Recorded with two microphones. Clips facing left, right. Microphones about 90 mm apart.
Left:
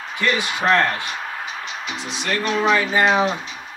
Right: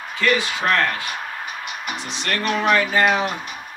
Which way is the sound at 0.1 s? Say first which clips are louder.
Right 2 dB; 20° left (ahead or behind).